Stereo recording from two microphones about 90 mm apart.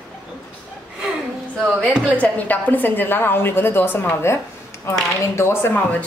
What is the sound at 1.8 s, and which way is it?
A woman's voice, 15° left (ahead or behind).